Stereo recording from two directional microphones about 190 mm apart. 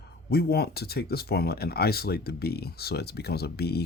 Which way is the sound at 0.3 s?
55° left (ahead or behind).